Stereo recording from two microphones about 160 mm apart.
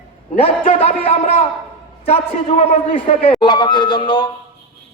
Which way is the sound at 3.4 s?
30° left (ahead or behind).